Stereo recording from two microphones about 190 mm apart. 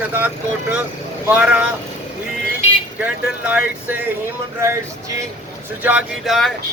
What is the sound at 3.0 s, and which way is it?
Speech, 5° right (ahead or behind).